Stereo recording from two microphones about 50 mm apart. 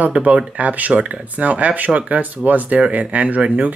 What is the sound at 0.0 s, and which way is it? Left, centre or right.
Speech, right.